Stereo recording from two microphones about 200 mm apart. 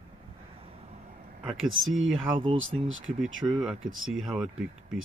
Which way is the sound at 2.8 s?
75° right (ahead or behind).